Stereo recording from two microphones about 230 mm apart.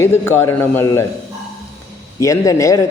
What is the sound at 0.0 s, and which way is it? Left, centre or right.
A man's voice, centre.